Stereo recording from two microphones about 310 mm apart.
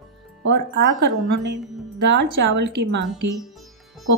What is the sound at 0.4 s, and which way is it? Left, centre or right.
Speech, right.